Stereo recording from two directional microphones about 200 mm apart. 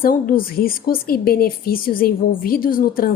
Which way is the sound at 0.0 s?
45° left (ahead or behind).